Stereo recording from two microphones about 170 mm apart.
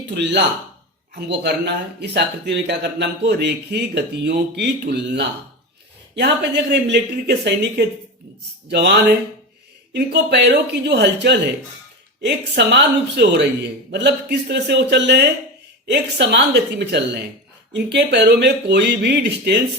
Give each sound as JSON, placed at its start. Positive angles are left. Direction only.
{"t": 0.1, "sound": "a man's voice", "side_deg": -85}